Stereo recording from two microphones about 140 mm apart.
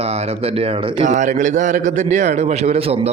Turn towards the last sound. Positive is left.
turn(degrees=-45)  # may be behind; listen again after turning